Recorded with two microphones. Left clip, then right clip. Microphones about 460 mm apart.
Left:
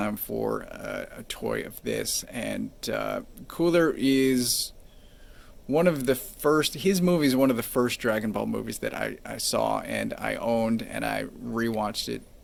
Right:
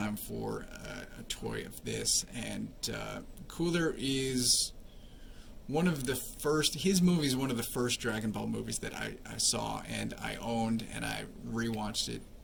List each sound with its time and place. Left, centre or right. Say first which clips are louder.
0.0 s speech: left 9 dB; centre
5.7 s speech: left 10 dB; centre